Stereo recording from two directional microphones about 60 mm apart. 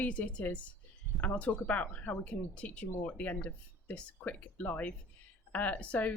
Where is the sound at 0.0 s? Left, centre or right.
Left.